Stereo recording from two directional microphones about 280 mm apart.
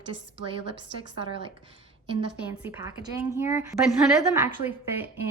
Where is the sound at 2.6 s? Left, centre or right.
Centre.